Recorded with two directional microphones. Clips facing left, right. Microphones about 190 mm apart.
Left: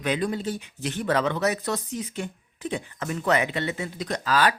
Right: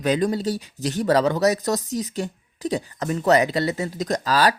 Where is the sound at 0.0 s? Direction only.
40° right (ahead or behind).